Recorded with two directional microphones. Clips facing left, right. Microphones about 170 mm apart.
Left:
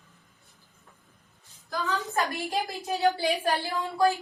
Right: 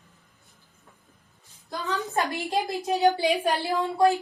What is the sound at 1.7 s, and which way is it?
A woman's voice, 20° right (ahead or behind).